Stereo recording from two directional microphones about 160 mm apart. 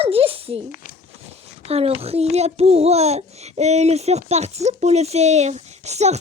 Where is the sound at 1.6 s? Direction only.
40° right (ahead or behind).